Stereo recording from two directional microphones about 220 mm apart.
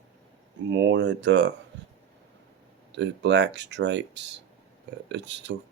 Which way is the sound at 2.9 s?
55° right (ahead or behind).